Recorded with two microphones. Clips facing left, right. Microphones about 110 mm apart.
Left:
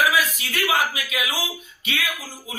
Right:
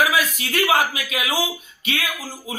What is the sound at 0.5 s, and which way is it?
Speech, 45° right (ahead or behind).